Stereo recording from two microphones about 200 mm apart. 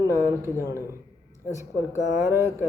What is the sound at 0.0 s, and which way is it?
Speech, 15° right (ahead or behind).